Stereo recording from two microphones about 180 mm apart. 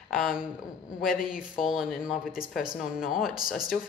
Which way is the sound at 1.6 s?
Centre (ahead or behind).